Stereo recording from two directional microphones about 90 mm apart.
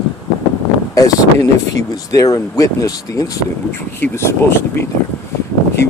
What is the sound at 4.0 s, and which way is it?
Speech, 25° left (ahead or behind).